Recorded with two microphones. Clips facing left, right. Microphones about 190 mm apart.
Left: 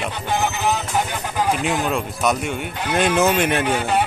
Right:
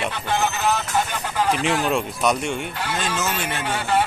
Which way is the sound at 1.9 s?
Centre (ahead or behind).